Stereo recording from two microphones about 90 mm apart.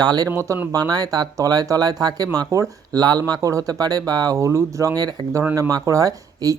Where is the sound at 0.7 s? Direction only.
45° right (ahead or behind).